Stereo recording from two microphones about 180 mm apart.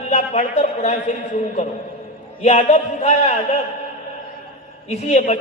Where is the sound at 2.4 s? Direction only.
35° left (ahead or behind).